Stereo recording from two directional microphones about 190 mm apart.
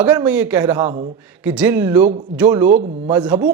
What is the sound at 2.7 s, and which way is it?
Speech, 40° right (ahead or behind).